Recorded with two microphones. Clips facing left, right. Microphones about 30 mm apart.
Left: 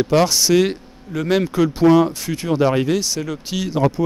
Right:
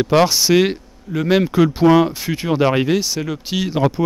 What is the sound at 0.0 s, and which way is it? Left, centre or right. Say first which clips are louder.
Speech: right 2 dB; centre.